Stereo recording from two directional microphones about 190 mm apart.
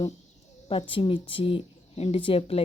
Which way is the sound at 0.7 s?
30° left (ahead or behind).